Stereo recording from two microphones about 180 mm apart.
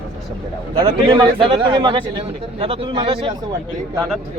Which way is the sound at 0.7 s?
30° right (ahead or behind).